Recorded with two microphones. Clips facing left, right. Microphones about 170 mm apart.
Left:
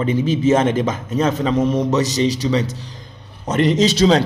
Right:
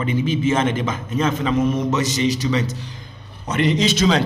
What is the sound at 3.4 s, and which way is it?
Speech, 40° left (ahead or behind).